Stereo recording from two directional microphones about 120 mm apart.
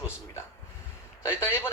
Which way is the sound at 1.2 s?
20° left (ahead or behind).